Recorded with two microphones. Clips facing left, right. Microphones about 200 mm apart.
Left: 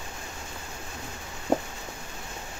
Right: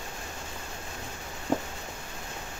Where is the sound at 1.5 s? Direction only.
45° left (ahead or behind).